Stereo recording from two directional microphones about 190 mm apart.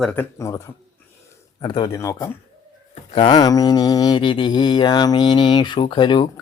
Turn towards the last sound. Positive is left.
turn(degrees=25)  # may be behind; listen again after turning